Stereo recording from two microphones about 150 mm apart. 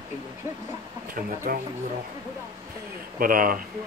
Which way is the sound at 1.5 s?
70° right (ahead or behind).